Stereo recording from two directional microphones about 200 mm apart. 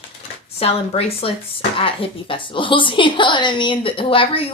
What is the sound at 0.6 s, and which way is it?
A woman's voice, 30° left (ahead or behind).